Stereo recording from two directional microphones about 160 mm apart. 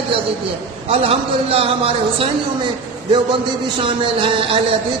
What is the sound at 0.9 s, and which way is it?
A man's voice, 35° right (ahead or behind).